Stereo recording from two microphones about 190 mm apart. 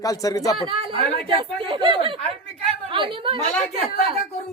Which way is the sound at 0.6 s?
30° right (ahead or behind).